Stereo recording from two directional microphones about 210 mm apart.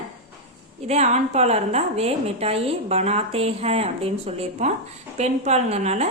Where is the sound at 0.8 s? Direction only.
30° right (ahead or behind).